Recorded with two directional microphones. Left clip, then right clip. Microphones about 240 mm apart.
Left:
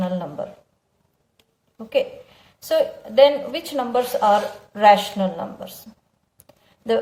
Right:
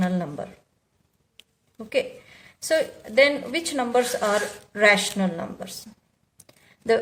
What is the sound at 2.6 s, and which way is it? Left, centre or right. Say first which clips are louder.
Speech: left 3 dB; right.